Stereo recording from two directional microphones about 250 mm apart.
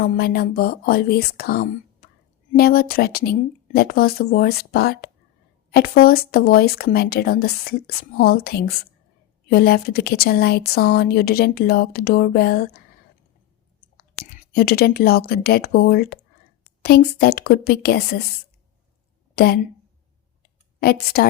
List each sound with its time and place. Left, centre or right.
0.0 s a woman's voice: left
13.8 s a woman's voice: left
20.7 s a woman's voice: left